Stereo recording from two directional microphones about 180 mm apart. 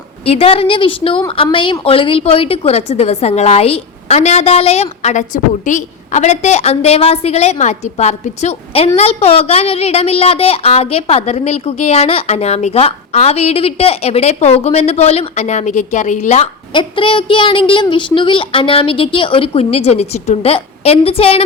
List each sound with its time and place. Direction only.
0.3 s a woman's voice: 30° left (ahead or behind)